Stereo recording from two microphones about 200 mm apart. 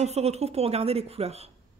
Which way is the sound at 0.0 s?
30° right (ahead or behind).